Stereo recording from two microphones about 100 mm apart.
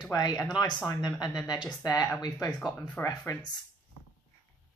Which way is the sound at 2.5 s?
Centre (ahead or behind).